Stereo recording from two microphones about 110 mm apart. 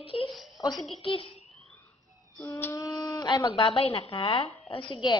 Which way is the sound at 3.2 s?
40° left (ahead or behind).